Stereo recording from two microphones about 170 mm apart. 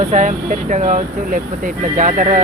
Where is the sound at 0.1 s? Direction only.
45° right (ahead or behind).